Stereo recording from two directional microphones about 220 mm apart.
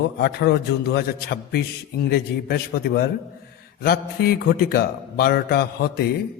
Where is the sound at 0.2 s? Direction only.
45° left (ahead or behind).